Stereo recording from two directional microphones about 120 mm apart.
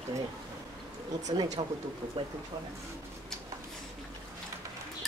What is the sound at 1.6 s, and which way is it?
Speech, 45° right (ahead or behind).